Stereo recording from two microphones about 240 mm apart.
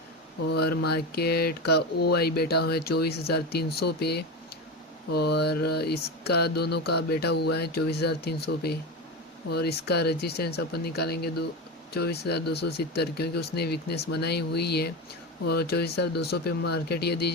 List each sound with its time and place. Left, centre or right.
0.4 s speech: left